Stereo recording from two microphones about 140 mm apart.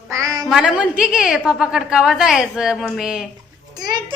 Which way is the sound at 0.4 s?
5° right (ahead or behind).